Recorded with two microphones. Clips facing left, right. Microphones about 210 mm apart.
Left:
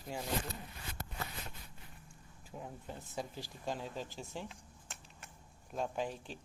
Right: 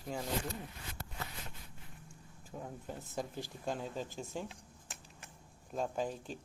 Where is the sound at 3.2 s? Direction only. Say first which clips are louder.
Right 2 dB; 50° right (ahead or behind).